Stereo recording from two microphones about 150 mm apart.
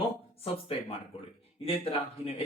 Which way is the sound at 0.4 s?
40° left (ahead or behind).